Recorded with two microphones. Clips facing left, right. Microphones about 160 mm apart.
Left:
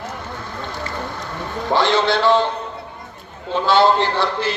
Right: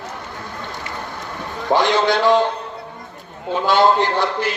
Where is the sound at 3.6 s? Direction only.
15° right (ahead or behind).